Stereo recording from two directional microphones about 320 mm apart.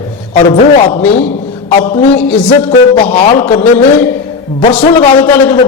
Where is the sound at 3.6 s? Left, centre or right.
Centre.